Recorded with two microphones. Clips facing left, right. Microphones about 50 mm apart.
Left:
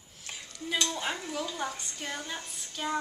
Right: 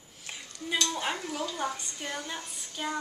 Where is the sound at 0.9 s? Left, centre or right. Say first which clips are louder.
Right 2 dB; centre.